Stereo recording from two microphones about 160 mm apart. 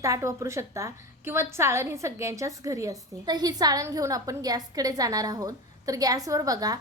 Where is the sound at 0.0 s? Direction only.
20° right (ahead or behind).